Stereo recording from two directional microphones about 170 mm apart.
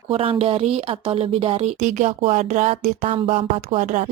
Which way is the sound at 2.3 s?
45° right (ahead or behind).